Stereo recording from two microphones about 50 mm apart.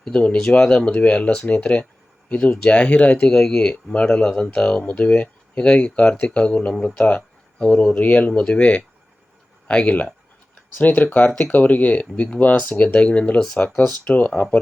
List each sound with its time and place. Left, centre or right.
0.1 s speech: left
3.9 s speech: left
7.9 s speech: left
8.4 s speech: centre
14.0 s speech: left